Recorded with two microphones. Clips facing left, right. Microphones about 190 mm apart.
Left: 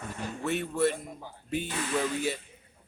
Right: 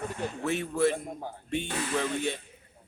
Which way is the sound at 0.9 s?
50° right (ahead or behind).